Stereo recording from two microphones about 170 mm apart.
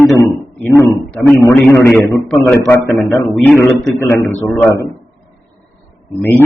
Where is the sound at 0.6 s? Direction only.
15° left (ahead or behind).